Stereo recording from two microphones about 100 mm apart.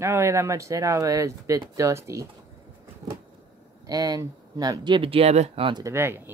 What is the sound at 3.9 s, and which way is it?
Speech, 40° right (ahead or behind).